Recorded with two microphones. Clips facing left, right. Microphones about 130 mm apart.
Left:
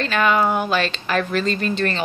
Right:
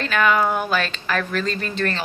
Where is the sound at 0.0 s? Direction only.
Centre (ahead or behind).